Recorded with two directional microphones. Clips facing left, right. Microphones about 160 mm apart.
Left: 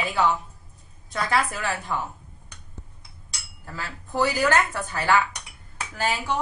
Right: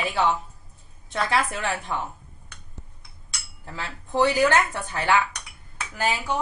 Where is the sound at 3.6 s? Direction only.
25° right (ahead or behind).